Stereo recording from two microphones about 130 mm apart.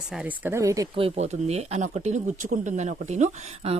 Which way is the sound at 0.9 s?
50° right (ahead or behind).